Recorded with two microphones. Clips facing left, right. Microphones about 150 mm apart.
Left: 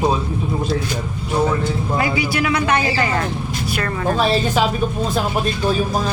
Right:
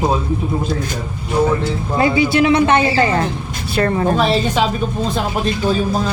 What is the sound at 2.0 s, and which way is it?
Speech, 25° right (ahead or behind).